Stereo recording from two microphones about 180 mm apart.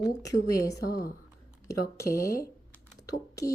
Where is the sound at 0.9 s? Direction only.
55° left (ahead or behind).